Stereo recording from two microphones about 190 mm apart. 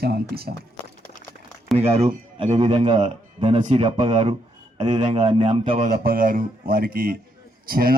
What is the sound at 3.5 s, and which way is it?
A man's voice, 40° right (ahead or behind).